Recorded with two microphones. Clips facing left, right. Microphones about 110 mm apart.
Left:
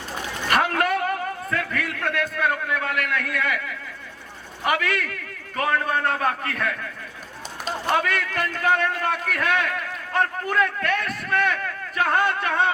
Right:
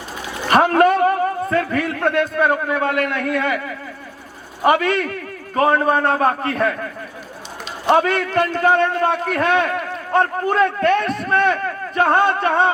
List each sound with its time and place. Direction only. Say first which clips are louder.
0.4 s a man's voice: right 8 dB; 30° right (ahead or behind)